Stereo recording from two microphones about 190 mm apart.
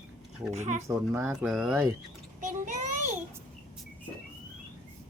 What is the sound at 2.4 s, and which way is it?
Speech, 40° right (ahead or behind).